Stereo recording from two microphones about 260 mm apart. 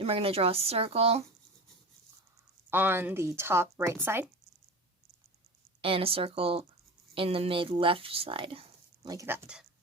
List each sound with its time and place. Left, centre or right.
0.0 s speech: right
2.6 s speech: centre
5.8 s speech: right